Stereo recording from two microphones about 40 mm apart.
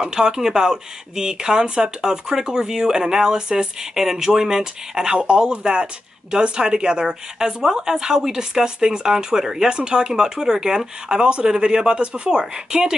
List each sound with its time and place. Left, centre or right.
0.0 s speech: centre